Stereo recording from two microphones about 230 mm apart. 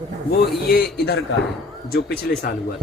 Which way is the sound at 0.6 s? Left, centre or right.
Left.